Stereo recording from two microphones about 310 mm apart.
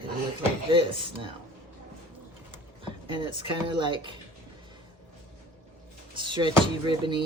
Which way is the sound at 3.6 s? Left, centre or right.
Centre.